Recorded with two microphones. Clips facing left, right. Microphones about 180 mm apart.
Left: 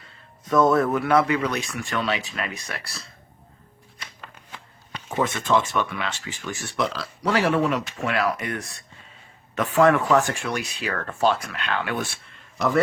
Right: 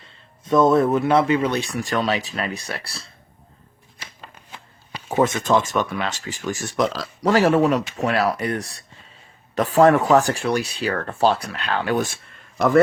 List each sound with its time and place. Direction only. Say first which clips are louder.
0.0 s speech: even; 25° right (ahead or behind)
4.2 s a sound: right 1 dB; 20° right (ahead or behind)
5.1 s speech: right 4 dB; 40° right (ahead or behind)